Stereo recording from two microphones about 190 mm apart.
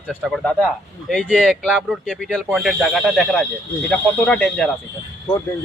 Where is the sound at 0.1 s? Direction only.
Centre (ahead or behind).